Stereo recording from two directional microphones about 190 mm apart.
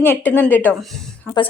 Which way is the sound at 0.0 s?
10° left (ahead or behind).